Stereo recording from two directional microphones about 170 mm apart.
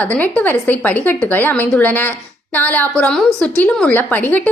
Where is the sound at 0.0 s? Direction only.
10° left (ahead or behind).